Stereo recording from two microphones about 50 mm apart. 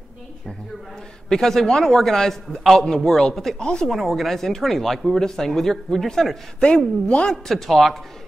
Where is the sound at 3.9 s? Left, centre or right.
Centre.